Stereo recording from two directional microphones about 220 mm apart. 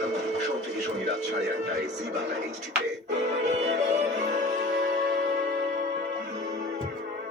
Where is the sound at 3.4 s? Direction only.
30° right (ahead or behind).